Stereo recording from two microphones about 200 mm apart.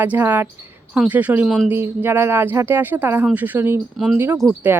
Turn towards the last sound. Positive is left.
turn(degrees=-5)  # may be behind; listen again after turning